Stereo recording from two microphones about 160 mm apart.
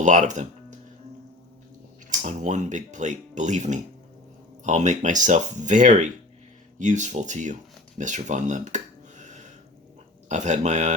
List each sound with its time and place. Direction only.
0.0 s speech: 50° right (ahead or behind)
2.0 s speech: 50° right (ahead or behind)